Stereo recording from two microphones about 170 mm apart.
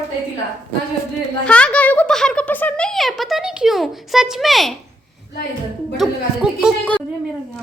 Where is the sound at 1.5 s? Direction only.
5° left (ahead or behind).